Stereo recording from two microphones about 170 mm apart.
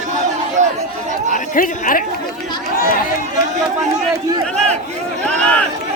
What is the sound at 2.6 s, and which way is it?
Chatter, 60° left (ahead or behind).